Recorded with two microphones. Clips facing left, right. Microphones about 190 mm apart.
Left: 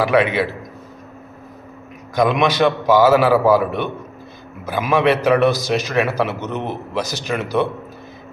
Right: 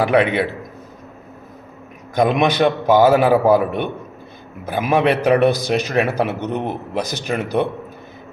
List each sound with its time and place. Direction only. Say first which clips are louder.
0.0 s a man's voice: even; 55° right (ahead or behind)
2.2 s a man's voice: even; 50° right (ahead or behind)